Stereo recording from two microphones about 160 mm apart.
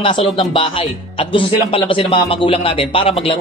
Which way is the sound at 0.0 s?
35° left (ahead or behind).